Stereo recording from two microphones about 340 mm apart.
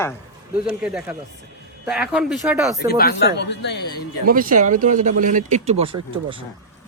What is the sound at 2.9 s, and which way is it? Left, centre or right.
Speech, left.